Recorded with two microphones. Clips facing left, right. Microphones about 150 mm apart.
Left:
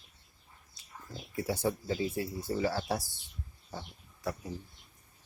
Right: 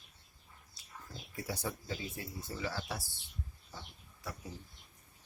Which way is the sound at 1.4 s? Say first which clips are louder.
Left 8 dB; 30° left (ahead or behind).